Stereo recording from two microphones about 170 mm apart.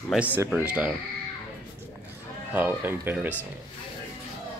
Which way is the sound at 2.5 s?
10° right (ahead or behind).